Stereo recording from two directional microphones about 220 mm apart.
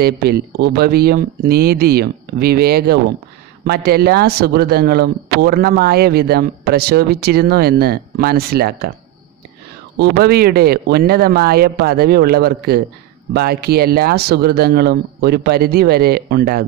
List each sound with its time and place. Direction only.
0.0 s speech: 45° right (ahead or behind)
9.9 s speech: 45° right (ahead or behind)